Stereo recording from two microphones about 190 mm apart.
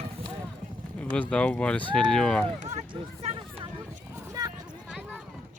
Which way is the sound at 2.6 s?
35° right (ahead or behind).